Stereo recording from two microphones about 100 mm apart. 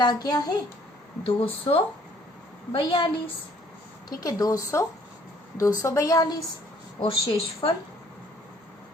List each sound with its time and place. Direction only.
0.0 s a child's voice: 45° left (ahead or behind)
1.2 s a woman's voice: 70° left (ahead or behind)
2.7 s a woman's voice: 60° left (ahead or behind)
4.2 s a woman's voice: 40° left (ahead or behind)
7.0 s a woman's voice: 70° left (ahead or behind)